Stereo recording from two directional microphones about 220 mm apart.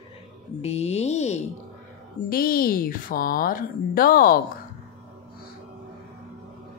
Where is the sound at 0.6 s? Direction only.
30° left (ahead or behind).